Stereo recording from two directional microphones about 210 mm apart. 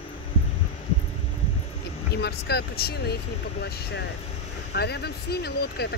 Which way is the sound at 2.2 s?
50° left (ahead or behind).